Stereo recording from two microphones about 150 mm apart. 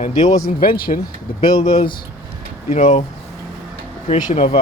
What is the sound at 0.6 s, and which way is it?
Speech, 75° left (ahead or behind).